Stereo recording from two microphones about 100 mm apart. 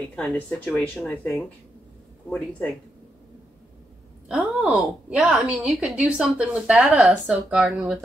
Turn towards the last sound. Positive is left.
turn(degrees=-10)  # may be behind; listen again after turning